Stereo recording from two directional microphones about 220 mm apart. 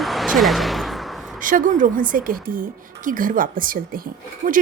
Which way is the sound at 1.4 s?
35° right (ahead or behind).